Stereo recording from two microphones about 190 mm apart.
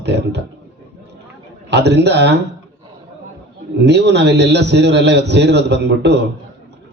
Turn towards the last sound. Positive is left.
turn(degrees=-60)  # may be behind; listen again after turning